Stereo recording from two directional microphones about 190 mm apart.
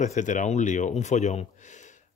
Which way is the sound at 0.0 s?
40° left (ahead or behind).